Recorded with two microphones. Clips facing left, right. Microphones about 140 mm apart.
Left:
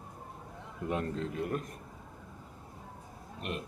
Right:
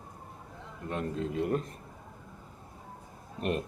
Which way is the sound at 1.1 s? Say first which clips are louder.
Right 4 dB; 20° right (ahead or behind).